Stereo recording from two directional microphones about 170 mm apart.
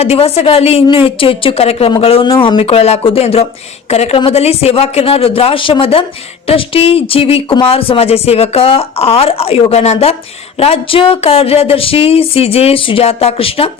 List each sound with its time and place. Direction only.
0.0 s speech: 35° left (ahead or behind)